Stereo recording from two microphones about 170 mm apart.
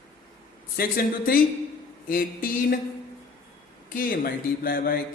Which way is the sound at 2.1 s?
55° left (ahead or behind).